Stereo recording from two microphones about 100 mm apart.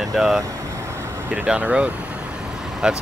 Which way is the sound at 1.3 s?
15° right (ahead or behind).